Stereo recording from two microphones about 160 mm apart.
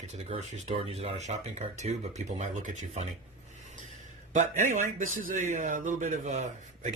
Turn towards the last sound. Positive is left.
turn(degrees=-50)  # may be behind; listen again after turning